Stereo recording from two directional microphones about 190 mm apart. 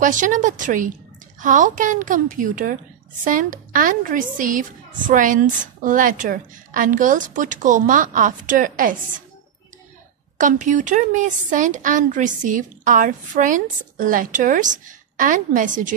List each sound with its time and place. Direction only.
0.0 s a woman's voice: 45° right (ahead or behind)
10.3 s a woman's voice: 40° right (ahead or behind)